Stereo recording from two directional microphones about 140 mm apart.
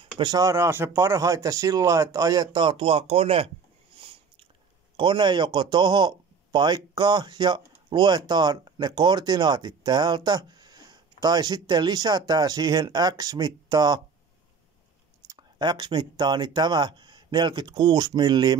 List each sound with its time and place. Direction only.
0.0 s speech: 30° right (ahead or behind)
4.9 s speech: 35° right (ahead or behind)
15.2 s speech: 30° right (ahead or behind)